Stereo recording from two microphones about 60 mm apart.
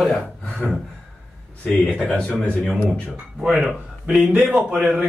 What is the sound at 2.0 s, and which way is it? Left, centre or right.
Speech, centre.